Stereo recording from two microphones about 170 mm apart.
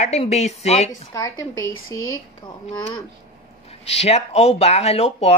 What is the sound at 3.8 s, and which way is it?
Speech, 35° left (ahead or behind).